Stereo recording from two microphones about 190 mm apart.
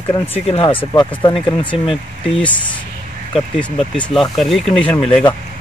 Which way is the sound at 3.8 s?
Centre (ahead or behind).